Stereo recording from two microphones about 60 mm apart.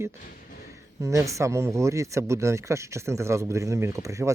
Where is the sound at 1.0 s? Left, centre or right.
Right.